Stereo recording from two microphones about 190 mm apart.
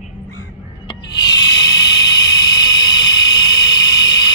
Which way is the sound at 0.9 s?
20° left (ahead or behind).